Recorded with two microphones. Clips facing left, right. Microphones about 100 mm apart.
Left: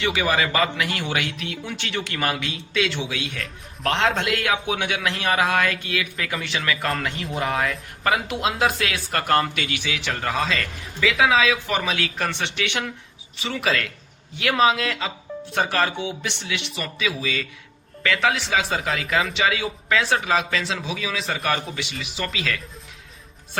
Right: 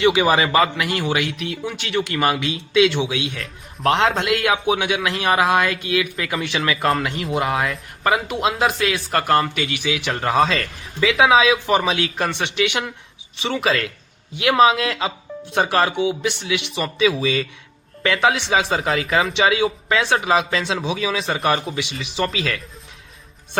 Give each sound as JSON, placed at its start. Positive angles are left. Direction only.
{"t": 0.0, "sound": "speech", "side_deg": -20}
{"t": 0.6, "sound": "speech", "side_deg": -5}
{"t": 3.3, "sound": "speech", "side_deg": 0}
{"t": 6.4, "sound": "speech", "side_deg": -20}
{"t": 7.3, "sound": "speech", "side_deg": 0}
{"t": 10.1, "sound": "speech", "side_deg": -35}
{"t": 13.4, "sound": "speech", "side_deg": -25}
{"t": 16.8, "sound": "speech", "side_deg": -30}